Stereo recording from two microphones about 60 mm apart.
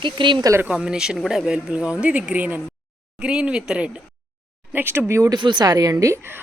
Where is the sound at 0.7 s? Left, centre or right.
Centre.